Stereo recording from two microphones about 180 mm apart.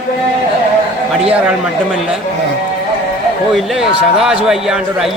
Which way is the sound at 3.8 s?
5° right (ahead or behind).